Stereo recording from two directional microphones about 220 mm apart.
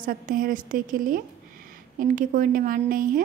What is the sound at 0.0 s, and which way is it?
A woman's voice, 40° right (ahead or behind).